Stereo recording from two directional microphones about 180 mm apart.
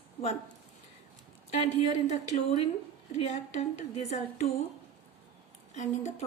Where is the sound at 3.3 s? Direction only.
40° left (ahead or behind).